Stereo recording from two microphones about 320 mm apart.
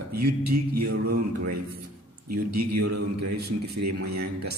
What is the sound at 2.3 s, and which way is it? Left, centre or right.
A man's voice, right.